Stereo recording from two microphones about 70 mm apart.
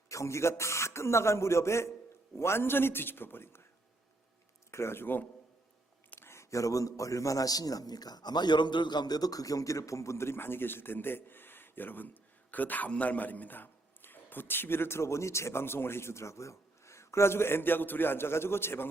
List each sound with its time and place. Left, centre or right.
0.1 s a man's voice: left
4.7 s a man's voice: left